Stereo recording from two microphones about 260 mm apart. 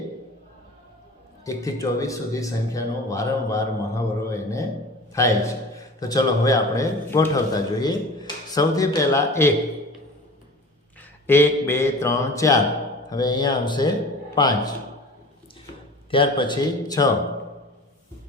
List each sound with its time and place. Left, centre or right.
1.5 s a man's voice: centre
11.3 s a man's voice: centre
16.0 s a man's voice: centre